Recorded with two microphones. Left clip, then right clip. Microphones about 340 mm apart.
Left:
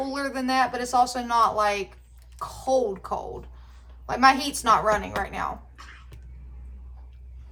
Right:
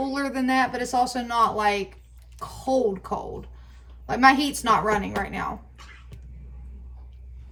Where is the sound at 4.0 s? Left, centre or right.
Left.